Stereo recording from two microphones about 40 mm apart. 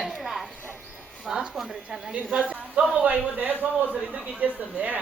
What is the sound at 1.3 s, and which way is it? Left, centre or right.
Speech, centre.